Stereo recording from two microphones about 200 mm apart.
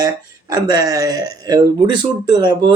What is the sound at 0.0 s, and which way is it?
Speech, 20° right (ahead or behind).